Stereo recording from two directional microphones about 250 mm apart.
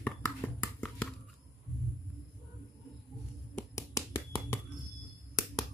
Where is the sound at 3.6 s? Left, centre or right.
Centre.